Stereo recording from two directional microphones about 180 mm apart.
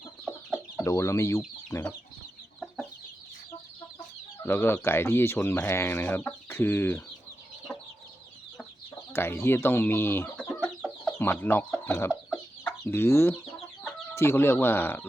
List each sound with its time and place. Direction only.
0.9 s speech: 15° left (ahead or behind)
4.4 s speech: 10° left (ahead or behind)
9.1 s speech: 15° left (ahead or behind)
12.3 s chicken: 10° left (ahead or behind)
14.2 s speech: 15° left (ahead or behind)